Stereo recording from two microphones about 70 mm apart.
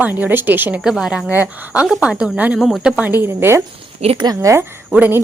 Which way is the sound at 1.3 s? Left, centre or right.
Right.